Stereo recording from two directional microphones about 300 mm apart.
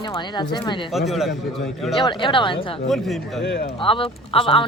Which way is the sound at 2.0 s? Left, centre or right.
Centre.